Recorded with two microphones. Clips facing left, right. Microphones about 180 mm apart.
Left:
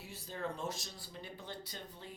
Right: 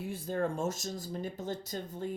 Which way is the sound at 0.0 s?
50° right (ahead or behind).